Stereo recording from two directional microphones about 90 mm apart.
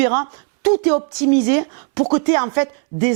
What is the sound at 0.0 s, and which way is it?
A woman's voice, 15° right (ahead or behind).